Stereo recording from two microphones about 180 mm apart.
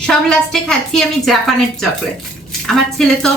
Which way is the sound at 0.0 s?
5° left (ahead or behind).